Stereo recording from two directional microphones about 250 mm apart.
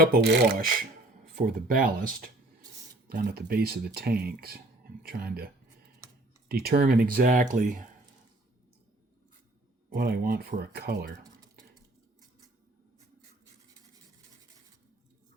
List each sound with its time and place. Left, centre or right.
0.0 s speech: right
6.5 s speech: right
9.9 s speech: right
11.2 s typing: centre